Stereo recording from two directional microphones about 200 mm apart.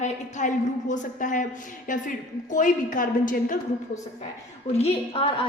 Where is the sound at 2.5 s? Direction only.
40° left (ahead or behind).